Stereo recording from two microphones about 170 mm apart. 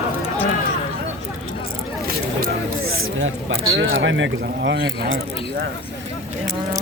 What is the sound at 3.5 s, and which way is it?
Speech, 90° right.